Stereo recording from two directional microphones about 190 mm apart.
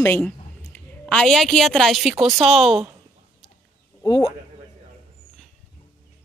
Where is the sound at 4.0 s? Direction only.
15° left (ahead or behind).